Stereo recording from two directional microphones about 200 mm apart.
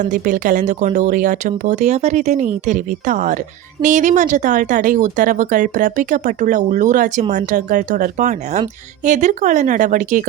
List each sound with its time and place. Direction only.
0.0 s speech: 40° right (ahead or behind)